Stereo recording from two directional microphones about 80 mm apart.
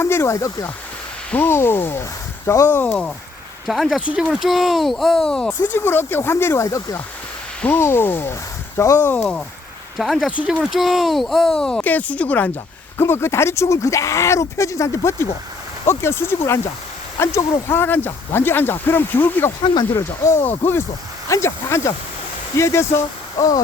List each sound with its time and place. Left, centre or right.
0.0 s speech: left
1.3 s speech: left
3.7 s speech: centre
5.5 s speech: left
7.8 s speech: left
9.1 s speech: centre
10.0 s speech: centre
11.8 s speech: left
13.0 s speech: left
19.9 s speech: left